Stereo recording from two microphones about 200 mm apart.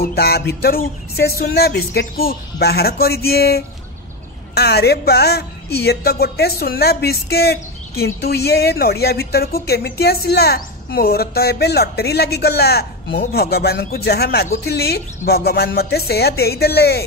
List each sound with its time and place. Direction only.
0.0 s speech: 50° left (ahead or behind)